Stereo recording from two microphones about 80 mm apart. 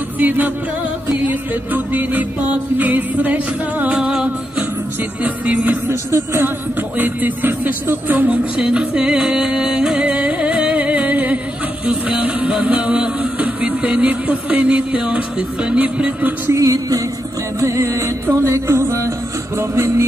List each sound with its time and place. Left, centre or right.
0.2 s speech: right
2.8 s music: right
5.9 s music: right
7.0 s speech: right
8.5 s music: centre
16.4 s music: right